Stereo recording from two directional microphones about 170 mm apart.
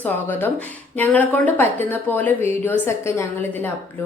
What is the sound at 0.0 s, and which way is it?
Speech, 10° left (ahead or behind).